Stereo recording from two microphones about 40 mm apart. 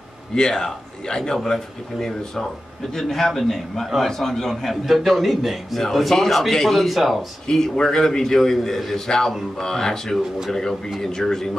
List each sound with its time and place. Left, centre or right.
0.3 s a man's voice: centre
7.4 s a man's voice: centre